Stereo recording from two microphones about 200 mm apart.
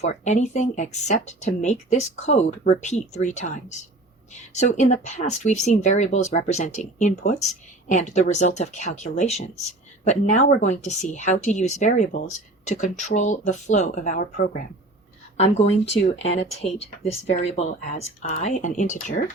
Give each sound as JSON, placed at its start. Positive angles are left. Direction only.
{"t": 0.0, "sound": "speech", "side_deg": 35}